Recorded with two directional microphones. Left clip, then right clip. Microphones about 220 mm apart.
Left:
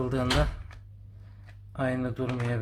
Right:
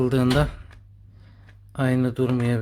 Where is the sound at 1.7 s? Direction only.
45° right (ahead or behind).